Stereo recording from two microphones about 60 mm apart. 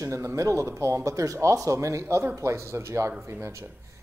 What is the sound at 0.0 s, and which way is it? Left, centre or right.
Speech, right.